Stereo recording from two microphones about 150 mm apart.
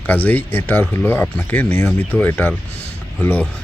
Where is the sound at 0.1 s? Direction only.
10° left (ahead or behind).